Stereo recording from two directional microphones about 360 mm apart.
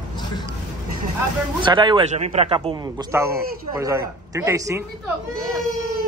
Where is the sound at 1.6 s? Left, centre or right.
Centre.